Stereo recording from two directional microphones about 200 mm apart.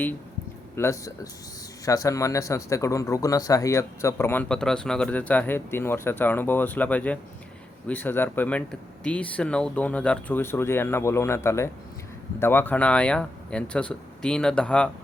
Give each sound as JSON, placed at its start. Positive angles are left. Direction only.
{"t": 0.8, "sound": "speech", "side_deg": 15}